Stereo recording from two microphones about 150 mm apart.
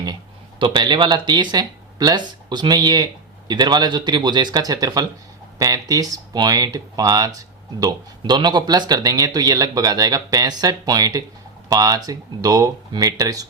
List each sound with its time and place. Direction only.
0.6 s speech: 30° right (ahead or behind)